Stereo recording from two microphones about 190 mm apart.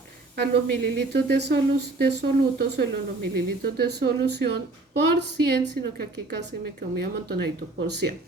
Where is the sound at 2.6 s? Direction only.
60° right (ahead or behind).